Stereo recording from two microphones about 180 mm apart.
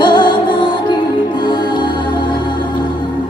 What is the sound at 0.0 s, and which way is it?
Music, 25° left (ahead or behind).